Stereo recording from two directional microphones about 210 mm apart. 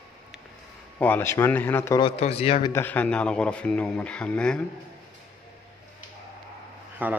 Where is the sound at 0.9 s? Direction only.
10° left (ahead or behind).